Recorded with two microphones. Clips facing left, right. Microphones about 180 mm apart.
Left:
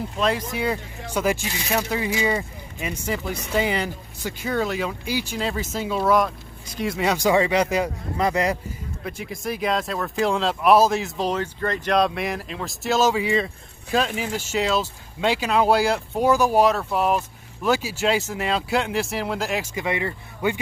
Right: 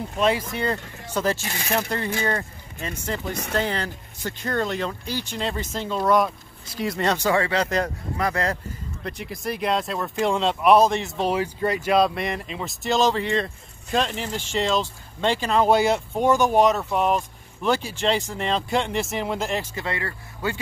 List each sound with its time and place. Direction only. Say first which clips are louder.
0.2 s speech: right 1 dB; 5° right (ahead or behind); by 8.5 s 15° left (ahead or behind)
9.0 s speech: even; centre (ahead or behind); by 20.5 s 20° left (ahead or behind)